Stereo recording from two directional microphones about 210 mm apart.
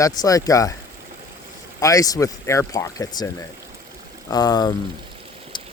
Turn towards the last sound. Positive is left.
turn(degrees=20)  # may be behind; listen again after turning